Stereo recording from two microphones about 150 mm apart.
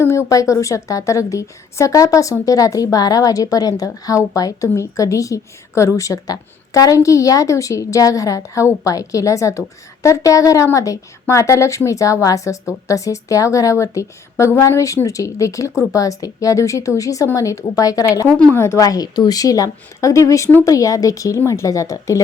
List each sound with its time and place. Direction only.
0.0 s a woman's voice: 20° left (ahead or behind)